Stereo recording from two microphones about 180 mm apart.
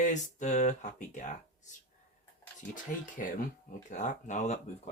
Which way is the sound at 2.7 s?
45° left (ahead or behind).